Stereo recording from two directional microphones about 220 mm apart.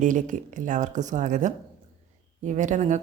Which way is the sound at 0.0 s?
35° right (ahead or behind).